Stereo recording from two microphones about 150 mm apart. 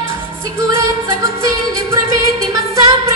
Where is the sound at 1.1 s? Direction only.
20° right (ahead or behind).